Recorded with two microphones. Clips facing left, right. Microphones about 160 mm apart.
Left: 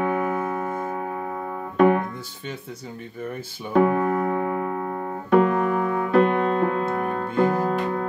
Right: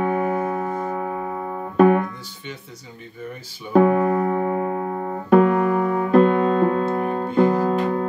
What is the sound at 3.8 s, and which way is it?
Music, 30° right (ahead or behind).